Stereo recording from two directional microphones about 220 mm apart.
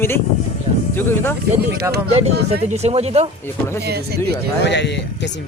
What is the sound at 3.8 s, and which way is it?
Speech, 45° right (ahead or behind).